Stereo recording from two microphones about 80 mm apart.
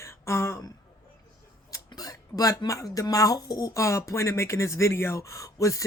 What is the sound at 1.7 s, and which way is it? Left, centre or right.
Speech, left.